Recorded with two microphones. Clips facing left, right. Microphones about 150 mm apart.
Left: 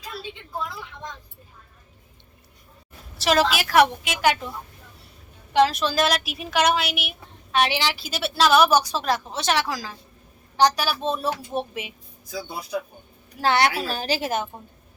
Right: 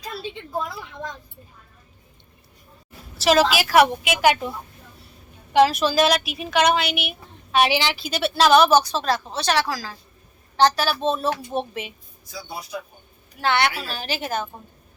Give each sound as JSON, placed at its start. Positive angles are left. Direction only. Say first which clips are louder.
{"t": 3.2, "sound": "a woman's voice", "louder": "right 3 dB", "side_deg": -5}
{"t": 5.5, "sound": "a woman's voice", "louder": "right 3 dB", "side_deg": -10}
{"t": 13.4, "sound": "a woman's voice", "louder": "left 1 dB", "side_deg": 40}
{"t": 14.3, "sound": "a woman's voice", "louder": "left 1 dB", "side_deg": 20}